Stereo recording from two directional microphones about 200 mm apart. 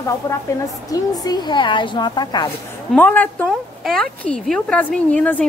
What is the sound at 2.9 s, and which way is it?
A woman's voice, 10° left (ahead or behind).